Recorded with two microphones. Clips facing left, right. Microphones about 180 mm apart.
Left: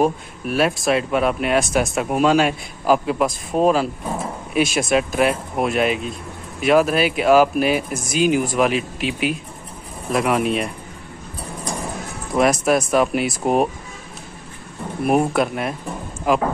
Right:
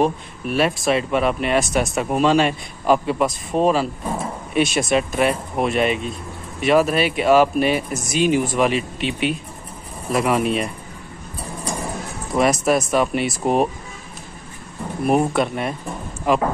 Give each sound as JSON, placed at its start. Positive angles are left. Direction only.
{"t": 0.0, "sound": "speech", "side_deg": 0}
{"t": 12.3, "sound": "speech", "side_deg": 0}
{"t": 15.0, "sound": "speech", "side_deg": 5}